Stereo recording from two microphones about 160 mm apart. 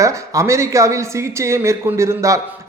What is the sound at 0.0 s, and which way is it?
A man's voice, 20° right (ahead or behind).